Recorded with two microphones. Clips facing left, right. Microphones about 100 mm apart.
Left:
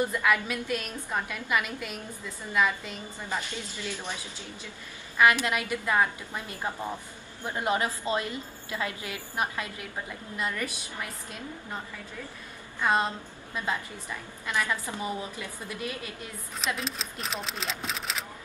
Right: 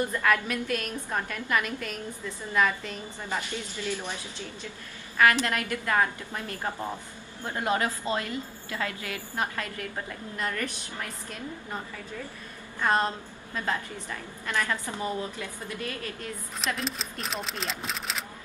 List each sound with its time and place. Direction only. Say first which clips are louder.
0.0 s a woman's voice: even; 10° left (ahead or behind)
5.1 s a woman's voice: even; 15° left (ahead or behind)
12.8 s a woman's voice: right 1 dB; 10° left (ahead or behind)
14.4 s a woman's voice: even; 15° left (ahead or behind)
16.6 s speech: right 1 dB; centre (ahead or behind)